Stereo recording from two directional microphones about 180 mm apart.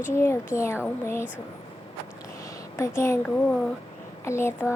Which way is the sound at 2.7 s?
15° left (ahead or behind).